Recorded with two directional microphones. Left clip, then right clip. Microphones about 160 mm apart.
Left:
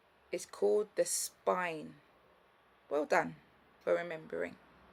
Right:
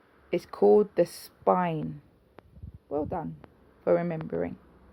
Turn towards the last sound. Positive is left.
turn(degrees=-25)  # may be behind; listen again after turning